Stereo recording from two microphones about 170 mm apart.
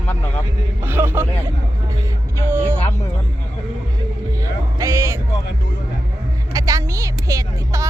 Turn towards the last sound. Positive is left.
turn(degrees=-15)  # may be behind; listen again after turning